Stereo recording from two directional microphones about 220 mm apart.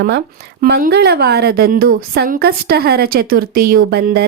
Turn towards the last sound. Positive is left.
turn(degrees=-45)  # may be behind; listen again after turning